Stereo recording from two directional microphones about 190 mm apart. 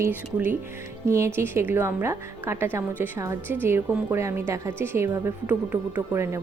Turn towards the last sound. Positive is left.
turn(degrees=-15)  # may be behind; listen again after turning